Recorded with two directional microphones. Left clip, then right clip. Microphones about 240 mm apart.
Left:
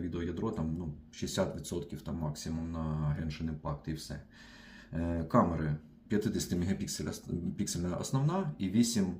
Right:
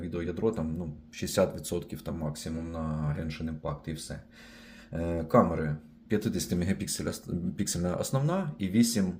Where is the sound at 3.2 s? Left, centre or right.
Right.